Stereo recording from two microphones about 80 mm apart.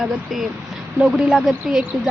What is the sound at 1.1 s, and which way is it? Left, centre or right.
Speech, centre.